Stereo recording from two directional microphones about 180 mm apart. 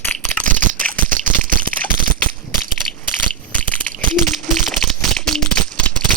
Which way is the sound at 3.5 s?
5° left (ahead or behind).